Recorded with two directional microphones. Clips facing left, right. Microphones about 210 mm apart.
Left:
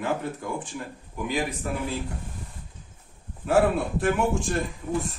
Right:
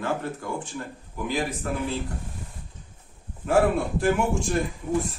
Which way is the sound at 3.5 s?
Centre (ahead or behind).